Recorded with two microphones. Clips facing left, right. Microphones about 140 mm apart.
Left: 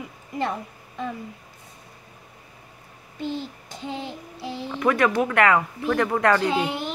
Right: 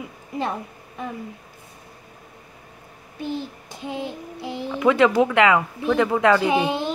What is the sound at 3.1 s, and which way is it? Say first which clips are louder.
A child's voice: right 1 dB; 15° right (ahead or behind).